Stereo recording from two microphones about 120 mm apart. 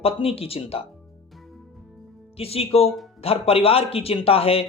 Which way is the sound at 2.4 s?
55° left (ahead or behind).